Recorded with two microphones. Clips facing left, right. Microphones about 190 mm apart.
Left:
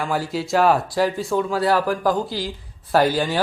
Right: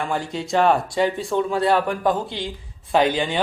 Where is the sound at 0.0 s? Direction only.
5° left (ahead or behind).